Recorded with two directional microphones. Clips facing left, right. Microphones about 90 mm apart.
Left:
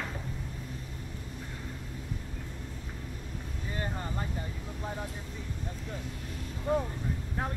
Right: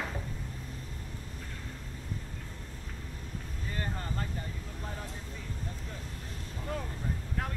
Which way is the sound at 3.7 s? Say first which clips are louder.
Left 1 dB; 15° left (ahead or behind).